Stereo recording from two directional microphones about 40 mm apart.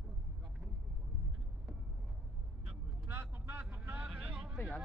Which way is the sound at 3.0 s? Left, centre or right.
Right.